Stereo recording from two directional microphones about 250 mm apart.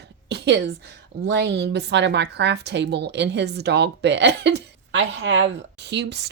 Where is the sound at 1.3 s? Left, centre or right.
Right.